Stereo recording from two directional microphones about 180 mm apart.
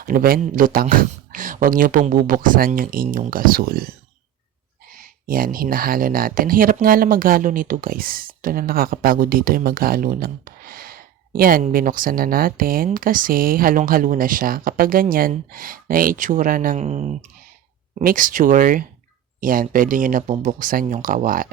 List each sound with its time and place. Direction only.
0.0 s speech: 55° right (ahead or behind)
4.9 s speech: 50° right (ahead or behind)
18.0 s speech: 50° right (ahead or behind)